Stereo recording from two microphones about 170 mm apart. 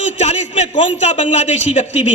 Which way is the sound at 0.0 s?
45° left (ahead or behind).